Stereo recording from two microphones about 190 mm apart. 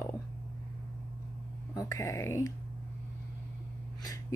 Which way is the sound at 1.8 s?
15° left (ahead or behind).